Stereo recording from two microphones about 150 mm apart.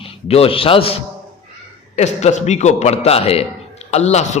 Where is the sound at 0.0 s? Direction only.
40° left (ahead or behind).